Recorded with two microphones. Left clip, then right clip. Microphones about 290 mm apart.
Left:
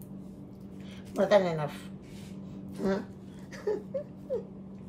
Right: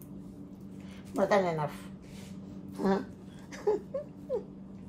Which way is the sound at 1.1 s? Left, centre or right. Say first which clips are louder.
Left 3 dB; centre.